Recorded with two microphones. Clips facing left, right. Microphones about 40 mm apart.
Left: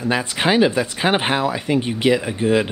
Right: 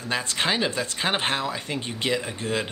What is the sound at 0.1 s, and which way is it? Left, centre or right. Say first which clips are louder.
Speech: left 6 dB; centre.